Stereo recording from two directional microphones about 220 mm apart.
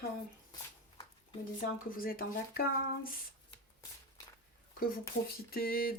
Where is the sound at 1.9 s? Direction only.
40° left (ahead or behind).